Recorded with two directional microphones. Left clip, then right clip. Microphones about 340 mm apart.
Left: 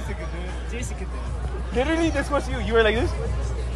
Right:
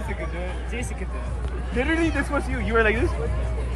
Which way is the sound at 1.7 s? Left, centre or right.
Left.